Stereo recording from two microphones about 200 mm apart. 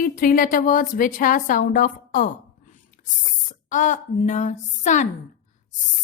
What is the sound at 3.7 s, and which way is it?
Speech, 40° left (ahead or behind).